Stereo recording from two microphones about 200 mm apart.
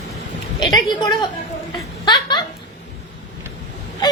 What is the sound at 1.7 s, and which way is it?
Laughter, 20° left (ahead or behind).